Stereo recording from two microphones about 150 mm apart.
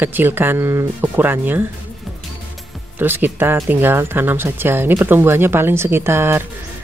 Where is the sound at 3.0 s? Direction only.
15° right (ahead or behind).